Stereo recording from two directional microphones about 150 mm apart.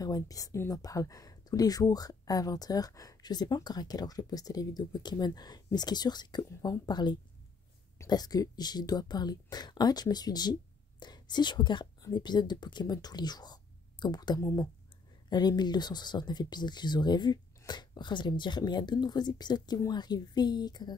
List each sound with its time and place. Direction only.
0.0 s speech: 25° left (ahead or behind)